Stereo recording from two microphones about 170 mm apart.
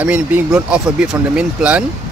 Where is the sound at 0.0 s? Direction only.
10° right (ahead or behind).